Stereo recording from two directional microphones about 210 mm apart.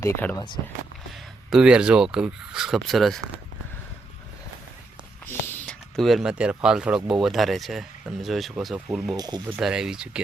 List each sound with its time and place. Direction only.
0.0 s speech: 10° left (ahead or behind)
1.5 s speech: 5° right (ahead or behind)
5.2 s speech: 5° left (ahead or behind)
9.1 s speech: 20° right (ahead or behind)
9.6 s speech: 5° right (ahead or behind)